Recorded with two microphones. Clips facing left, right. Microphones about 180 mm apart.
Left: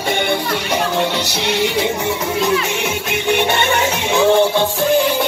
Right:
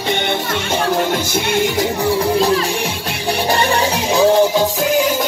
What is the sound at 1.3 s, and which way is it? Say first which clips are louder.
Music: right 1 dB; 50° right (ahead or behind).